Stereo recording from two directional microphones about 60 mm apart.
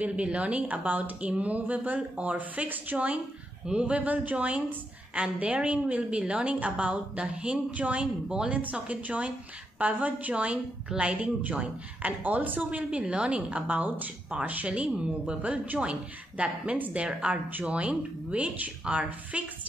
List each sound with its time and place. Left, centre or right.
0.0 s a woman's voice: right